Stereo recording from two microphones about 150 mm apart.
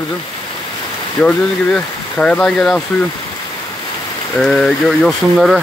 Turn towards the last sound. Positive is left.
turn(degrees=0)  # may be behind; listen again after turning